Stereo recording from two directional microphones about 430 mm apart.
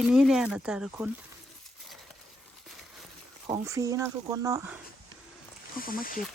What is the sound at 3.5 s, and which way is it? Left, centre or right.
Speech, centre.